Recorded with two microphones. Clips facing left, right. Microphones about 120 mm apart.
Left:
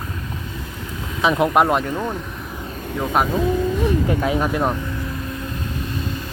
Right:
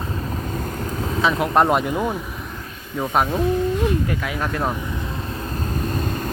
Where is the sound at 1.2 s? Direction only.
15° left (ahead or behind).